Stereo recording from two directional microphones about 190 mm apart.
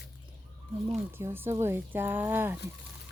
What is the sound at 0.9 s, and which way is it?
Speech, 10° right (ahead or behind).